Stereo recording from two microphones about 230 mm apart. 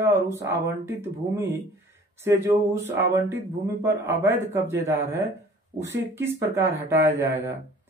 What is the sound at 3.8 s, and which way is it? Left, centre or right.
Speech, centre.